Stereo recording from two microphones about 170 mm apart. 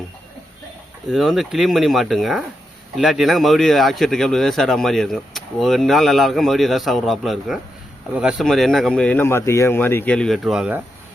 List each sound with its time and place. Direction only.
1.0 s speech: centre (ahead or behind)